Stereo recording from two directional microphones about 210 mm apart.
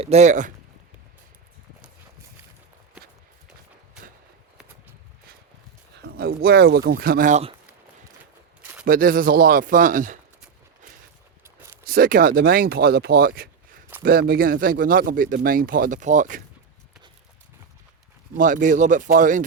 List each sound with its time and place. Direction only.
0.0 s speech: 30° right (ahead or behind)
6.0 s speech: 50° right (ahead or behind)
8.8 s speech: 40° right (ahead or behind)
11.9 s speech: 45° right (ahead or behind)
18.3 s speech: 40° right (ahead or behind)